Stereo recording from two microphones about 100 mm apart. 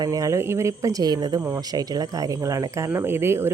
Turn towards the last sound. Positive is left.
turn(degrees=-25)  # may be behind; listen again after turning